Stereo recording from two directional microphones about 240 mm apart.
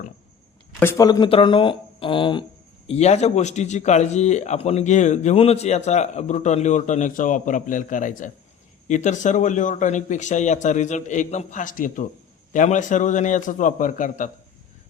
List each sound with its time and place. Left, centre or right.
0.8 s a man's voice: centre; by 14.3 s left